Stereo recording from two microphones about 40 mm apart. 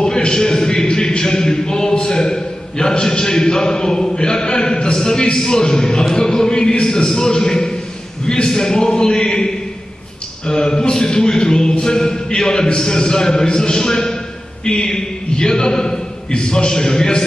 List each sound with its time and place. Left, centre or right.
0.0 s a man's voice: centre